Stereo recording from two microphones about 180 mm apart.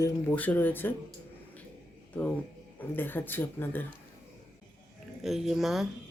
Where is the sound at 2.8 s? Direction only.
10° left (ahead or behind).